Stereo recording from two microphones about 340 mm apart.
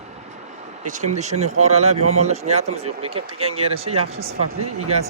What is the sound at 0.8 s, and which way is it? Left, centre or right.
Speech, right.